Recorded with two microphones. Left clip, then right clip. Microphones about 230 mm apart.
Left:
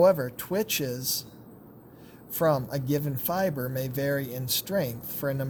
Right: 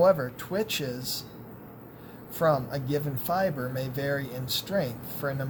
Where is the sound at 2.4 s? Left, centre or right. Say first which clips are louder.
Even; left.